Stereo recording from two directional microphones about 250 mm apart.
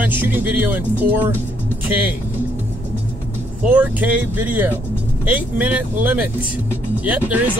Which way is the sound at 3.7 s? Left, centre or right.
Centre.